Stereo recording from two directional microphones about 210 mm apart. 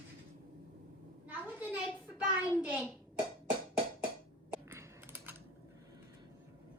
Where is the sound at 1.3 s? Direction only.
5° right (ahead or behind).